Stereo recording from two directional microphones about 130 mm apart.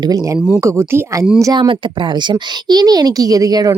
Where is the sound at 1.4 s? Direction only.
35° right (ahead or behind).